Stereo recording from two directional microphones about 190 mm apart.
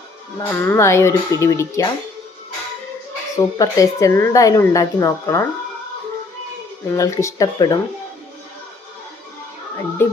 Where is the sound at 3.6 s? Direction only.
15° left (ahead or behind).